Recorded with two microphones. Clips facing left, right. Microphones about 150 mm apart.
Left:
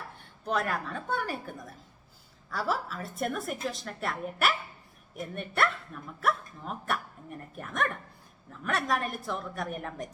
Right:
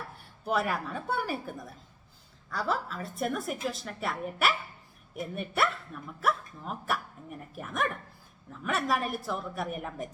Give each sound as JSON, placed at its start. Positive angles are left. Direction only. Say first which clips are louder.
{"t": 0.4, "sound": "speech", "louder": "right 1 dB", "side_deg": -10}